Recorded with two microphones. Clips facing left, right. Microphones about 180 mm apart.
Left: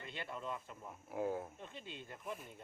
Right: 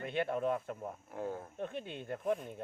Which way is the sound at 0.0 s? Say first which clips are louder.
Right 12 dB; 60° right (ahead or behind).